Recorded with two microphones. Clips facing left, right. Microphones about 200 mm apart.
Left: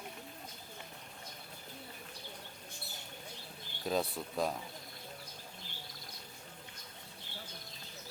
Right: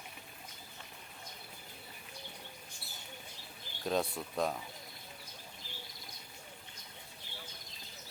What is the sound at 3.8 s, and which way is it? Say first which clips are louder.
Speech: right 1 dB; centre (ahead or behind).